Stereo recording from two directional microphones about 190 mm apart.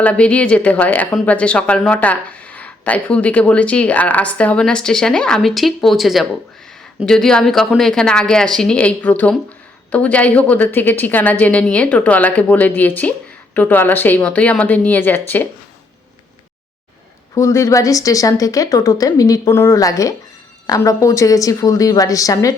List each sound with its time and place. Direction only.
0.0 s speech: 5° left (ahead or behind)
17.3 s speech: 15° left (ahead or behind)